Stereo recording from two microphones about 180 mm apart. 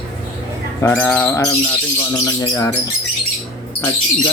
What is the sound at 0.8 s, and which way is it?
Bird, 10° left (ahead or behind).